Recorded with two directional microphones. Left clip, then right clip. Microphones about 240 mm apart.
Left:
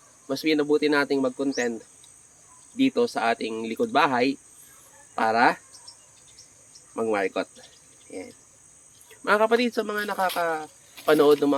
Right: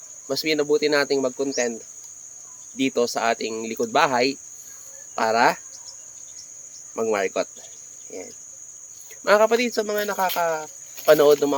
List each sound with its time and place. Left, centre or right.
0.3 s speech: right
2.7 s speech: right
6.9 s speech: right
9.2 s speech: right